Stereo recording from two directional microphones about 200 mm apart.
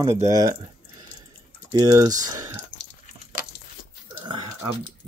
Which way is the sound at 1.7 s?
20° right (ahead or behind).